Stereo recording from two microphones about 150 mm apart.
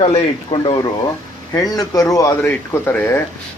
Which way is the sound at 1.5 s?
25° left (ahead or behind).